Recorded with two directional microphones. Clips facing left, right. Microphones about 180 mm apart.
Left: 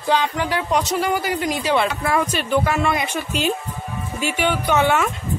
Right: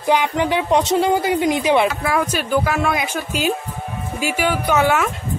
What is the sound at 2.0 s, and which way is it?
A woman's voice, centre (ahead or behind).